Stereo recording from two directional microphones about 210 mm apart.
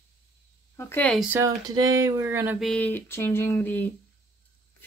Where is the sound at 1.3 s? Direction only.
15° right (ahead or behind).